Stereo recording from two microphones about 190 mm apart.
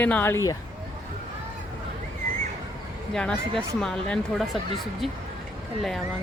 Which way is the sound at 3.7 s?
5° left (ahead or behind).